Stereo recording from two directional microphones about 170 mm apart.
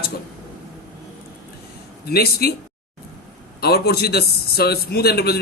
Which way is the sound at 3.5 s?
70° left (ahead or behind).